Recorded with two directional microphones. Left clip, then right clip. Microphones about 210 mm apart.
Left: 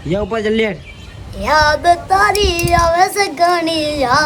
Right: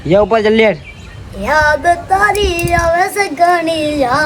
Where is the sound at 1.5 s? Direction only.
30° left (ahead or behind).